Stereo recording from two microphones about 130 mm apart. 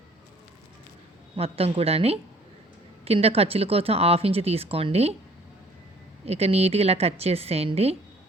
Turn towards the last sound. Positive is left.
turn(degrees=-50)  # may be behind; listen again after turning